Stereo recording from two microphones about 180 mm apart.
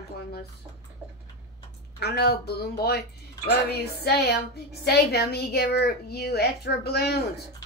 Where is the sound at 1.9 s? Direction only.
65° left (ahead or behind).